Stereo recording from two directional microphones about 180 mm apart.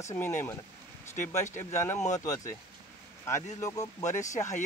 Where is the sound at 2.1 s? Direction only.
15° left (ahead or behind).